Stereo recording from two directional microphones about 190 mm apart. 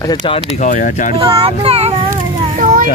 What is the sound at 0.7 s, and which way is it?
Speech, 40° left (ahead or behind).